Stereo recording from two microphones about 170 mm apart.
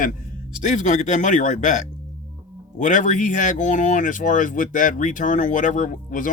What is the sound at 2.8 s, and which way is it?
Speech, 50° left (ahead or behind).